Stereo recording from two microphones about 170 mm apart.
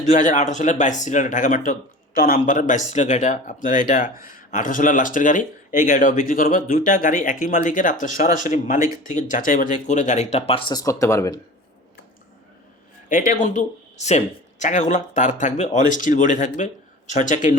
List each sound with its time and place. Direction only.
0.0 s speech: 45° left (ahead or behind); by 11.3 s 20° left (ahead or behind)
13.1 s speech: 50° left (ahead or behind)